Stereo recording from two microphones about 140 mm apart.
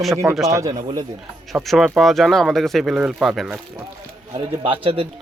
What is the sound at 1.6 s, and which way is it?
Speech, 5° right (ahead or behind).